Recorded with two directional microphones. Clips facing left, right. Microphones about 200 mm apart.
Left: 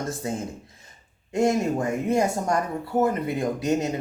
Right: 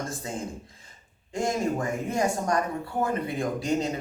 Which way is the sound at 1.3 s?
25° left (ahead or behind).